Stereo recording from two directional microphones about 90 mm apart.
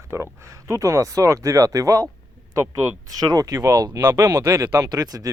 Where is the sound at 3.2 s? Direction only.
45° right (ahead or behind).